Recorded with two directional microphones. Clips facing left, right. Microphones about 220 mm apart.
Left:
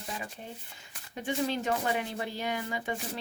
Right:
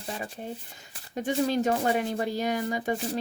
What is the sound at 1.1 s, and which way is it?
Speech, 40° right (ahead or behind).